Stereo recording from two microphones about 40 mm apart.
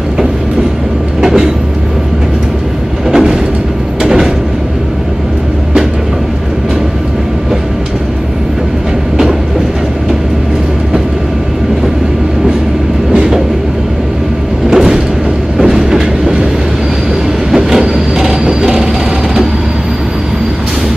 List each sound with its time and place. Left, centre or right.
1.2 s train: centre
3.1 s vehicle: centre
14.7 s vehicle: centre
15.5 s train: centre
17.5 s train: centre